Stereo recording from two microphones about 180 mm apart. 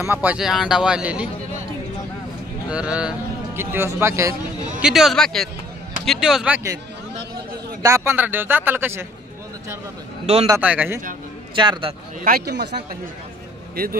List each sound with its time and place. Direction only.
0.0 s a man's voice: 10° right (ahead or behind)
2.7 s speech: 5° right (ahead or behind)
4.8 s a man's voice: centre (ahead or behind)
7.8 s speech: 15° right (ahead or behind)
10.2 s a man's voice: 35° right (ahead or behind)
10.6 s speech: 10° right (ahead or behind)
11.5 s a man's voice: 25° right (ahead or behind)
12.2 s speech: 55° right (ahead or behind)